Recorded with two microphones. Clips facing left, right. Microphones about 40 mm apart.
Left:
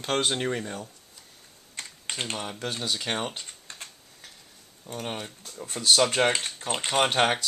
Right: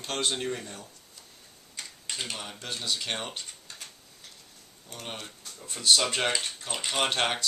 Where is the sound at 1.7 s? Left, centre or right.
Left.